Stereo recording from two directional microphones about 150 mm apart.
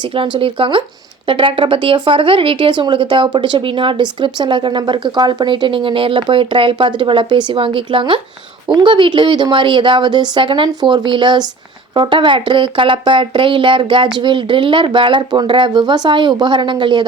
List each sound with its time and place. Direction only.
0.2 s speech: 35° right (ahead or behind)